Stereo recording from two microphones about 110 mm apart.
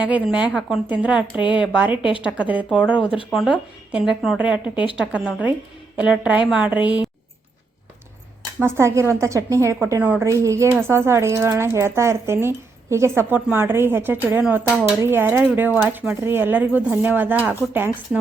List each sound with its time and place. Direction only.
0.0 s speech: 10° right (ahead or behind)
3.2 s speech: centre (ahead or behind)
8.6 s speech: 25° right (ahead or behind)
10.0 s speech: 15° right (ahead or behind)
10.2 s speech: 30° right (ahead or behind)